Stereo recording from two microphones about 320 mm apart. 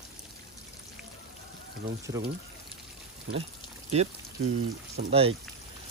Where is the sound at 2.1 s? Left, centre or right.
Centre.